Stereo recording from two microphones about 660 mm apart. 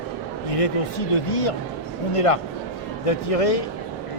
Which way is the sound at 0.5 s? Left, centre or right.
Left.